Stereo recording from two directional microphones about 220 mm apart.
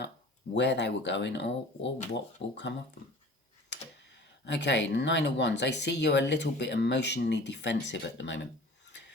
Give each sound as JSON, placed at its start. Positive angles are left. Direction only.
{"t": 0.5, "sound": "speech", "side_deg": 50}
{"t": 4.4, "sound": "speech", "side_deg": 50}